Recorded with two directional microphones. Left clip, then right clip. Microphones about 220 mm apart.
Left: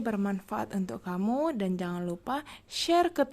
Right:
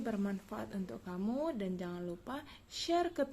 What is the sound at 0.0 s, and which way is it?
Speech, 35° left (ahead or behind).